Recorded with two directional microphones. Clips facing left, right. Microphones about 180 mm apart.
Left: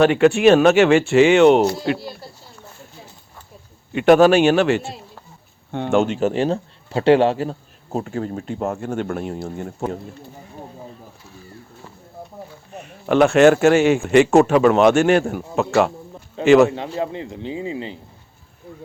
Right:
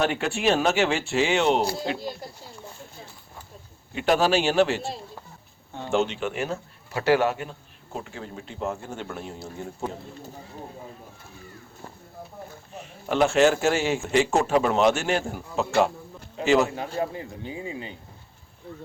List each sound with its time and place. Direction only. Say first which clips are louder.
0.0 s speech: left 11 dB; 75° left (ahead or behind)
3.9 s a man's voice: left 9 dB; 65° left (ahead or behind); by 7.5 s 30° left (ahead or behind)
7.9 s speech: left 11 dB; 45° left (ahead or behind); by 9.9 s 60° left (ahead or behind)
12.7 s speech: left 9 dB; 60° left (ahead or behind)
16.7 s speech: left 4 dB; 25° left (ahead or behind)